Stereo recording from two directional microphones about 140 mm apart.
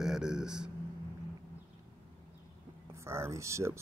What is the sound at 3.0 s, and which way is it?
Speech, 20° right (ahead or behind).